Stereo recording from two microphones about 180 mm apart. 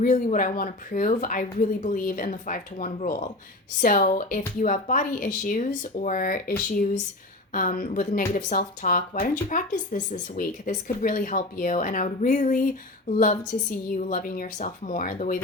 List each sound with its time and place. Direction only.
0.0 s speech: 45° left (ahead or behind)
7.5 s speech: 50° left (ahead or behind)